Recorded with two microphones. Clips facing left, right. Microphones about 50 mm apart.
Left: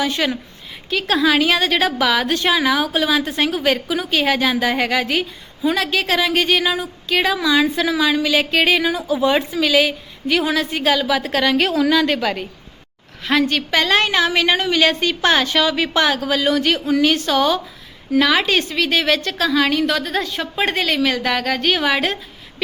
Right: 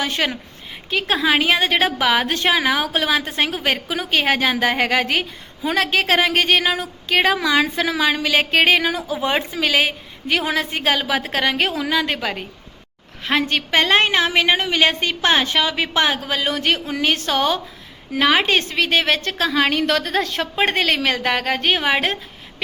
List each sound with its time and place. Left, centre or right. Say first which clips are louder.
0.0 s a woman's voice: left 2 dB; right
0.9 s a woman's voice: left 2 dB; right
9.1 s a woman's voice: left 4 dB; right; by 12.5 s centre
13.2 s a woman's voice: left 2 dB; right
20.6 s a woman's voice: even; right